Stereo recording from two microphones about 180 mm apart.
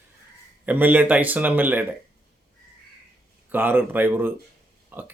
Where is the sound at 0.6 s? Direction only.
10° right (ahead or behind).